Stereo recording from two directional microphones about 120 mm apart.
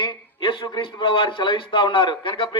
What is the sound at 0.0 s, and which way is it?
A man's voice, 45° left (ahead or behind).